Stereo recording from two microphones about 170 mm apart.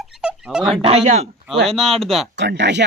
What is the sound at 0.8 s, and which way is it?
Speech, 35° right (ahead or behind).